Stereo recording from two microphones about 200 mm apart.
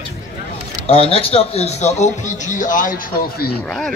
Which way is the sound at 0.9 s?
30° left (ahead or behind).